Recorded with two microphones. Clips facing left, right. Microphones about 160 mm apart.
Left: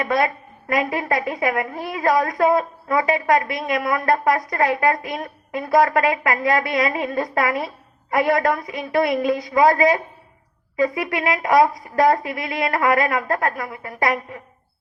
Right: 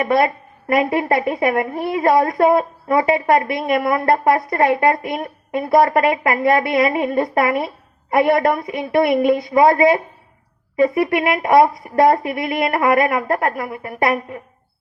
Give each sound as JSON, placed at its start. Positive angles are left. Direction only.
{"t": 0.0, "sound": "a woman's voice", "side_deg": -25}